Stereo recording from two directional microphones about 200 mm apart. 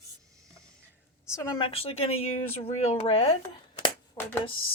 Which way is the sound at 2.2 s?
90° left.